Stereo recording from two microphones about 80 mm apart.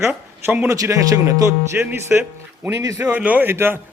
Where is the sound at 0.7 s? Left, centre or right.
Right.